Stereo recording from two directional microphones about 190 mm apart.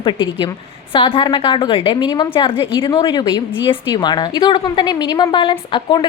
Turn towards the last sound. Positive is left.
turn(degrees=25)  # may be behind; listen again after turning